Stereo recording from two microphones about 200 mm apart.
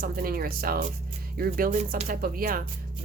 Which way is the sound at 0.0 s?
45° right (ahead or behind).